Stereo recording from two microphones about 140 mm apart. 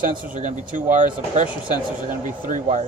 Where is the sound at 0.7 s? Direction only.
65° right (ahead or behind).